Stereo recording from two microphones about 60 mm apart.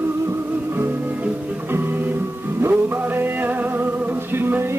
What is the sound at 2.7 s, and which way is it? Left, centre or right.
Music, right.